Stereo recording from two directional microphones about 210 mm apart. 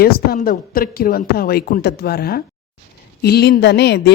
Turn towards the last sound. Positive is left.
turn(degrees=55)  # may be behind; listen again after turning